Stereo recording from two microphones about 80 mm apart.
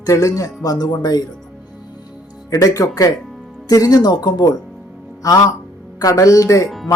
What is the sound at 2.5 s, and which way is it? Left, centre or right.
Speech, left.